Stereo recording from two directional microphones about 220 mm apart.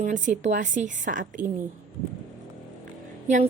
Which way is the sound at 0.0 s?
35° right (ahead or behind).